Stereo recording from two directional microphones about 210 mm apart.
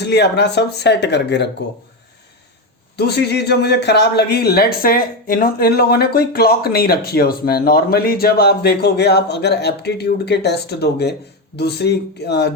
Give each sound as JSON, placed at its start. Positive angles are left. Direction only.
{"t": 0.0, "sound": "a man's voice", "side_deg": 55}
{"t": 2.9, "sound": "a man's voice", "side_deg": 50}